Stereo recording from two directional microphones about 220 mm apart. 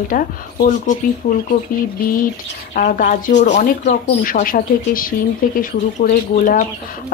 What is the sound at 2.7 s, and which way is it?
Speech, 35° left (ahead or behind).